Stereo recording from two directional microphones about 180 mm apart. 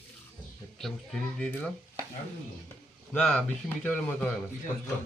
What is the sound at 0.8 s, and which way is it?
Speech, centre (ahead or behind).